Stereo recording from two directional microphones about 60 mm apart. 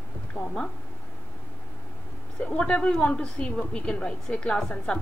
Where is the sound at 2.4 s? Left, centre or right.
Left.